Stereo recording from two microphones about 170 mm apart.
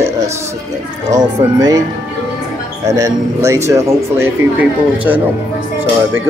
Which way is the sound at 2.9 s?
20° right (ahead or behind).